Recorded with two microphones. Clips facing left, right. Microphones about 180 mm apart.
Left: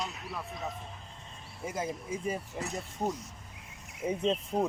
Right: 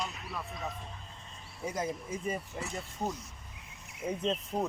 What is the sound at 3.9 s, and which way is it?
Speech, centre (ahead or behind).